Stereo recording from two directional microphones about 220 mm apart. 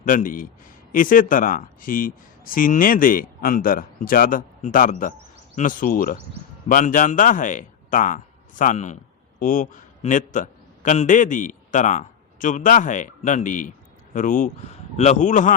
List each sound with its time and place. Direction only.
0.0 s a man's voice: 40° left (ahead or behind)